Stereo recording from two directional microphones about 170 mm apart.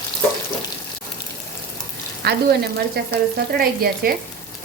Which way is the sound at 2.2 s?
70° right (ahead or behind).